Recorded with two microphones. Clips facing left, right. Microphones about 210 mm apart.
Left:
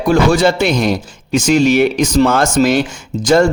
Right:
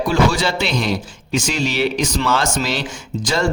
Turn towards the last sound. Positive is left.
turn(degrees=50)  # may be behind; listen again after turning